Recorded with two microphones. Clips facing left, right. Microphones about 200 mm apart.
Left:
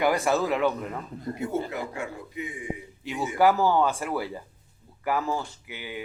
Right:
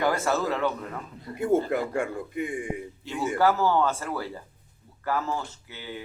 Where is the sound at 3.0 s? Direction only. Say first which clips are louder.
Left 1 dB; 15° left (ahead or behind).